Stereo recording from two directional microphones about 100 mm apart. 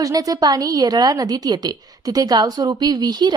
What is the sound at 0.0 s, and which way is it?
A woman's voice, 40° right (ahead or behind).